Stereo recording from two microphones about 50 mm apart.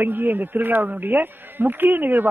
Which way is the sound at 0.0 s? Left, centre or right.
Right.